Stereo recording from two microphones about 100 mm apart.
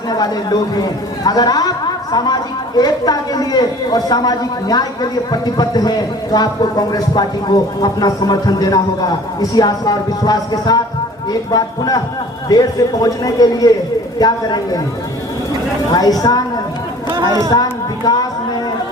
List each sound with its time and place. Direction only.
0.1 s speech: 40° left (ahead or behind)
15.9 s speech: 40° left (ahead or behind)
17.2 s a woman's voice: 40° right (ahead or behind)
17.5 s music: 45° left (ahead or behind)